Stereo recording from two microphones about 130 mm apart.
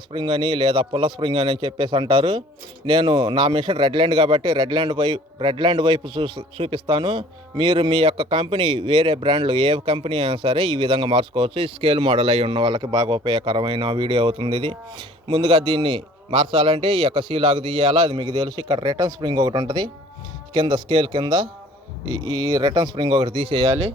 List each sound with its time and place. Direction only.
0.1 s a man's voice: 40° right (ahead or behind)